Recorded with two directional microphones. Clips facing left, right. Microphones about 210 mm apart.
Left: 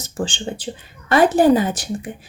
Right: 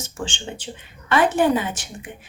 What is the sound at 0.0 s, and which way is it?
Speech, 35° left (ahead or behind).